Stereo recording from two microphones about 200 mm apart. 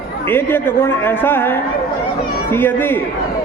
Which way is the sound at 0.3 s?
10° left (ahead or behind).